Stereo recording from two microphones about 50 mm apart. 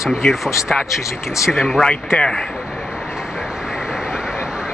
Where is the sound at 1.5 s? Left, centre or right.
Centre.